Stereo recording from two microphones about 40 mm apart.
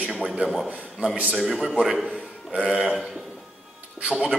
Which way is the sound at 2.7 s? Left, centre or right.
Right.